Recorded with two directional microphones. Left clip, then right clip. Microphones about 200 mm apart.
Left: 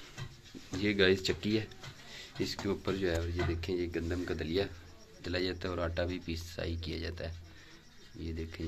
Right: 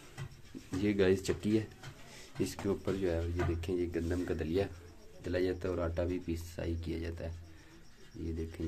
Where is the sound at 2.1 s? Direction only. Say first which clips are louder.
Even; 20° right (ahead or behind).